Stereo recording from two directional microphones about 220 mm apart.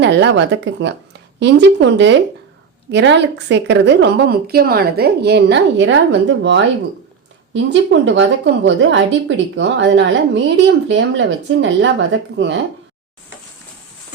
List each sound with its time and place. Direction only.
0.0 s a woman's voice: 55° right (ahead or behind)